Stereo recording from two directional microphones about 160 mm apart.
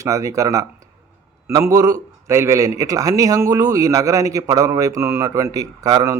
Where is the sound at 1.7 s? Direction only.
20° right (ahead or behind).